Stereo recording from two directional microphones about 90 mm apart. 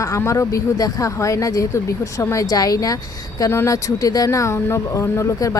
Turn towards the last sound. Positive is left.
turn(degrees=40)  # may be behind; listen again after turning